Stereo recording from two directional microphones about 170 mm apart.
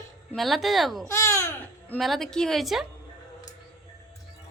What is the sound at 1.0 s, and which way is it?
Babbling, 15° left (ahead or behind).